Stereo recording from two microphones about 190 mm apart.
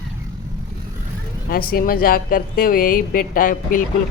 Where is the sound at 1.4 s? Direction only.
50° left (ahead or behind).